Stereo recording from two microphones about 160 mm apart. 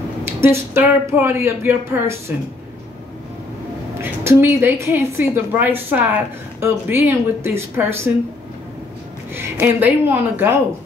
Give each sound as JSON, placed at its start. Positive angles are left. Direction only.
{"t": 0.2, "sound": "a woman's voice", "side_deg": -15}
{"t": 4.0, "sound": "a woman's voice", "side_deg": -15}
{"t": 9.3, "sound": "a woman's voice", "side_deg": -10}